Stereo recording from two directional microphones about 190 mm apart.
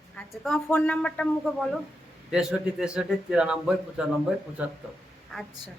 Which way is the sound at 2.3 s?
5° right (ahead or behind).